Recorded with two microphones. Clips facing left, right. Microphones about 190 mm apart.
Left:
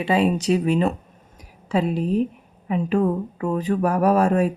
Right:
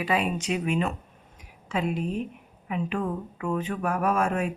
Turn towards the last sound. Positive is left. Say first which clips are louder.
# left 7 dB
turn(degrees=35)  # may be behind; listen again after turning